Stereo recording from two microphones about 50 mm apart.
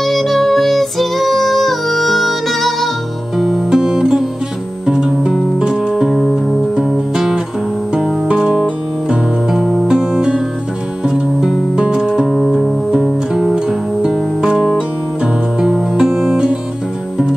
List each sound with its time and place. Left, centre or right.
0.0 s music: centre
3.6 s music: centre
6.7 s music: centre
9.5 s music: centre